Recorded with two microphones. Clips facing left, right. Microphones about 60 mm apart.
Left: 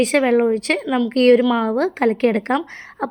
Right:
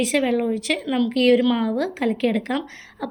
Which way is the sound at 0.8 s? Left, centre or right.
Centre.